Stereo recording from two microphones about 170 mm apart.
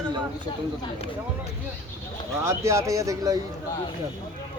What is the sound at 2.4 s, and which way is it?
Speech, 15° right (ahead or behind).